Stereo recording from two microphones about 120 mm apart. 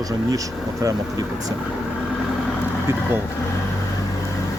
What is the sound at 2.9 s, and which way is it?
Speech, 20° right (ahead or behind).